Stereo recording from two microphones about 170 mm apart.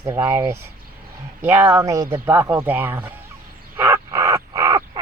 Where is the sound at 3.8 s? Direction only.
15° right (ahead or behind).